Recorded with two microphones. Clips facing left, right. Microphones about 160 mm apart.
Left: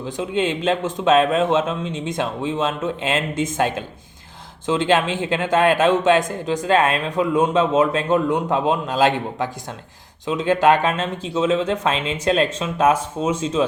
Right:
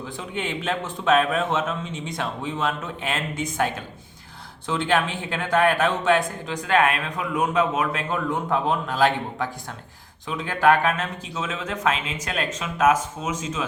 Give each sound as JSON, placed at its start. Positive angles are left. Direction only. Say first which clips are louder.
{"t": 0.0, "sound": "speech", "louder": "left 8 dB", "side_deg": 20}
{"t": 5.3, "sound": "speech", "louder": "left 3 dB", "side_deg": 20}